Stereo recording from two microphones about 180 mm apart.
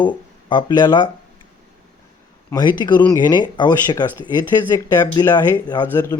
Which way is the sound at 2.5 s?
25° left (ahead or behind).